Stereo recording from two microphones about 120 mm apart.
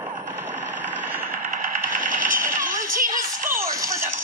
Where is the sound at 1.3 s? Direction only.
90° right.